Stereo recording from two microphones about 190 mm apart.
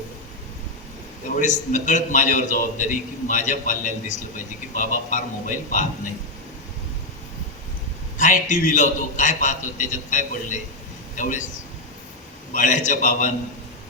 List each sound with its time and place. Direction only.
1.4 s a man's voice: 40° left (ahead or behind)
8.2 s a man's voice: 40° left (ahead or behind)
12.5 s a man's voice: 40° left (ahead or behind)